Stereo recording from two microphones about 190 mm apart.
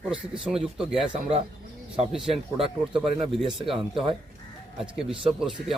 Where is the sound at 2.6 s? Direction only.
5° right (ahead or behind).